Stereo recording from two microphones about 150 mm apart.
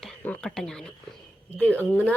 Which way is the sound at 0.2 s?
5° left (ahead or behind).